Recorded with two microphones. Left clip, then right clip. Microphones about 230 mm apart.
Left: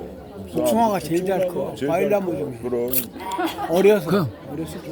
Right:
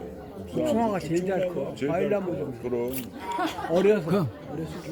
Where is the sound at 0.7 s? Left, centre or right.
Left.